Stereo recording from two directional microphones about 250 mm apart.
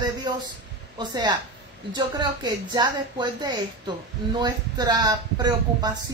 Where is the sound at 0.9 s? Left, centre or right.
Centre.